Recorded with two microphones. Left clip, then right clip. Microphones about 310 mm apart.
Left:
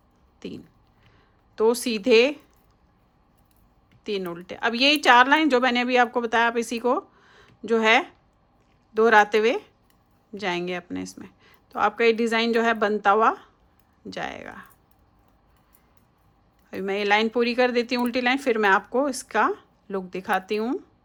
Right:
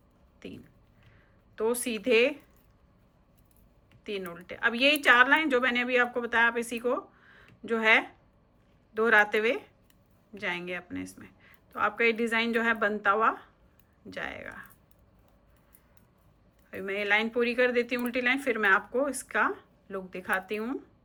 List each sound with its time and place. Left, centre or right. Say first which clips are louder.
0.3 s speech: left 7 dB; centre
4.0 s speech: left 7 dB; centre
16.6 s speech: left 6 dB; centre